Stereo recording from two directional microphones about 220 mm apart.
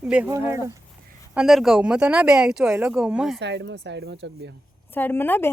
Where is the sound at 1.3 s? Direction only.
5° right (ahead or behind).